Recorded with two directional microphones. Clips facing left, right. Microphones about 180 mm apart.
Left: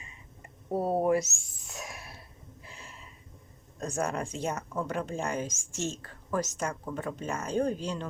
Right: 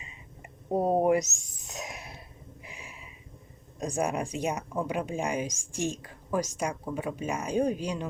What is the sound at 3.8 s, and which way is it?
Speech, 15° right (ahead or behind).